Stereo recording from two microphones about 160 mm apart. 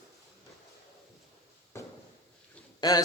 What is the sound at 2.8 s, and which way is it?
Speech, 25° left (ahead or behind).